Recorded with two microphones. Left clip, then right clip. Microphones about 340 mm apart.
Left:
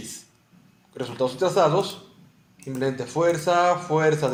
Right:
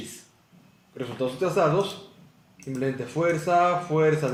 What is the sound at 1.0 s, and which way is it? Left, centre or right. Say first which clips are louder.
Speech: left 3 dB; left.